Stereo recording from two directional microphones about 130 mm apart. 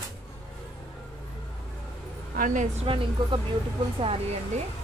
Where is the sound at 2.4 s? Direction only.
75° right (ahead or behind).